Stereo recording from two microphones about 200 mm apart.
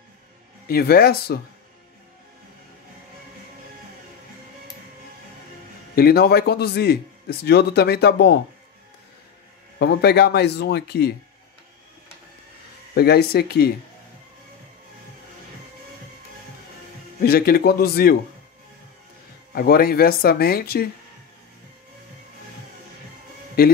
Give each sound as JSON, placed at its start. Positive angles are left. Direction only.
{"t": 0.7, "sound": "a man's voice", "side_deg": 50}
{"t": 5.9, "sound": "a man's voice", "side_deg": 50}
{"t": 9.8, "sound": "speech", "side_deg": 55}
{"t": 12.9, "sound": "a man's voice", "side_deg": 55}
{"t": 17.2, "sound": "a man's voice", "side_deg": 50}
{"t": 19.5, "sound": "a man's voice", "side_deg": 50}
{"t": 23.6, "sound": "a man's voice", "side_deg": 50}